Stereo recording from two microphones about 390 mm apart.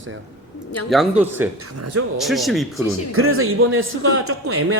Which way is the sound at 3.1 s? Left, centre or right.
Right.